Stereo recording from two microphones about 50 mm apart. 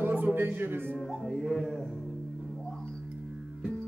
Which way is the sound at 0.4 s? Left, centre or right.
Right.